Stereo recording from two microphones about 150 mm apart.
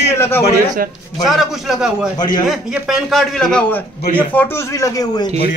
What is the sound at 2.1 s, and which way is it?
Speech, 30° left (ahead or behind).